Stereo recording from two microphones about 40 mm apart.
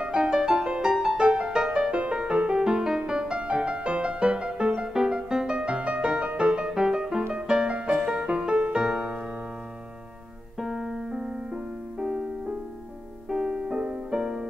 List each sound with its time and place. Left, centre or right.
0.0 s music: centre
10.6 s music: centre
14.2 s music: centre